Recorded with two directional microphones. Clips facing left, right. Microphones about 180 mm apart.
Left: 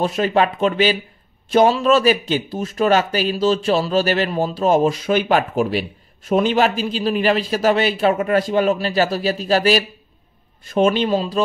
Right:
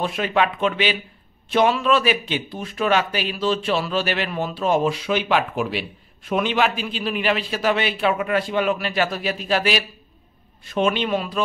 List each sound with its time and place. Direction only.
0.0 s speech: 40° left (ahead or behind)